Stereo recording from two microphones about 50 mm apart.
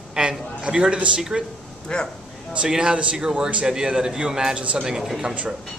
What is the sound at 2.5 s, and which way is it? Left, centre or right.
A man's voice, centre.